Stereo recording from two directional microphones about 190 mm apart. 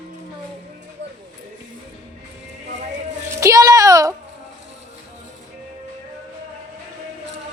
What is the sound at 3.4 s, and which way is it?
Speech, 20° right (ahead or behind).